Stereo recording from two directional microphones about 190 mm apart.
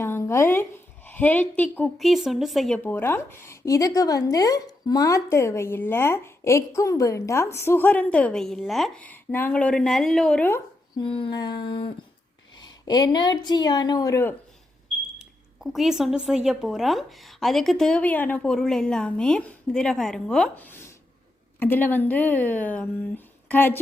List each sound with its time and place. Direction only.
0.0 s a sound: 15° left (ahead or behind)
1.0 s a woman's voice: 10° left (ahead or behind)
10.9 s speech: 25° left (ahead or behind)
15.2 s a woman's voice: centre (ahead or behind)